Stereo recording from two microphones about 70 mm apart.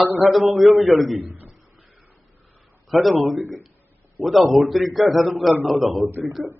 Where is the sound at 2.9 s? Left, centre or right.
Centre.